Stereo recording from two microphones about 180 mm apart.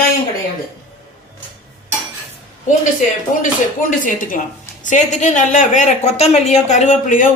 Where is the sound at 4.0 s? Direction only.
45° left (ahead or behind).